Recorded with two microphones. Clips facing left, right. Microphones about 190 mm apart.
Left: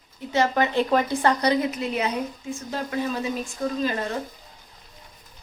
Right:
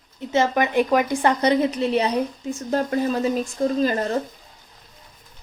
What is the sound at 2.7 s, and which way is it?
Speech, 45° right (ahead or behind).